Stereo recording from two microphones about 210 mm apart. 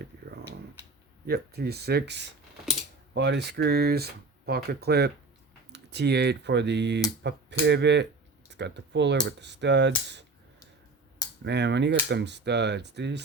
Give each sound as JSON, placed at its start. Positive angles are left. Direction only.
{"t": 1.3, "sound": "speech", "side_deg": -50}
{"t": 11.4, "sound": "speech", "side_deg": -55}